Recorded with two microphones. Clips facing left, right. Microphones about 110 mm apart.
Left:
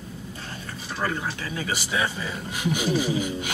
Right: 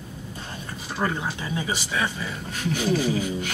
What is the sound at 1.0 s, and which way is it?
Speech, 20° right (ahead or behind).